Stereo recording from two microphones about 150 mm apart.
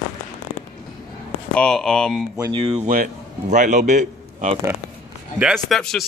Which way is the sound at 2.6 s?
45° right (ahead or behind).